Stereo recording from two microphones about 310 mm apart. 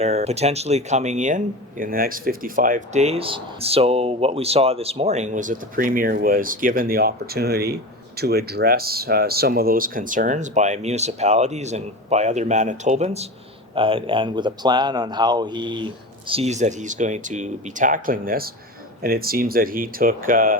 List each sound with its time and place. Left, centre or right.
0.0 s speech: right